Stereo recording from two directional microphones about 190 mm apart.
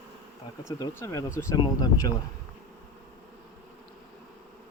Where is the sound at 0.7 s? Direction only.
15° left (ahead or behind).